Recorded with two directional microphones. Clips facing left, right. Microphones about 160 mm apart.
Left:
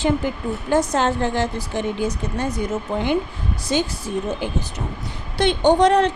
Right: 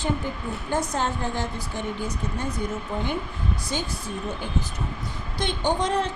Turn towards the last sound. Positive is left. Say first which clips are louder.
# left 9 dB
turn(degrees=75)  # may be behind; listen again after turning